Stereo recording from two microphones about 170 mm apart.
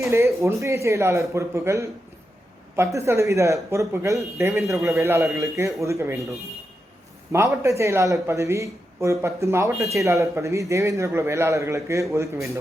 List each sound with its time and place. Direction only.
0.0 s speech: 15° right (ahead or behind)
7.3 s speech: 15° right (ahead or behind)